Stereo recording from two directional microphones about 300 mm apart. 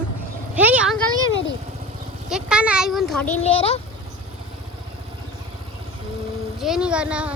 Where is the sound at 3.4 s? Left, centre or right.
Centre.